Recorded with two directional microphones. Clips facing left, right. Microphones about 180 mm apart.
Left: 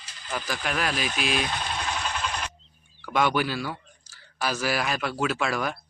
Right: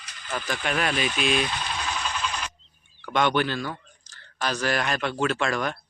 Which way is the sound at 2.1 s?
55° left (ahead or behind).